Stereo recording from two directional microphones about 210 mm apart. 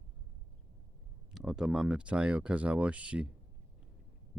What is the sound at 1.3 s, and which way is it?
Speech, centre (ahead or behind).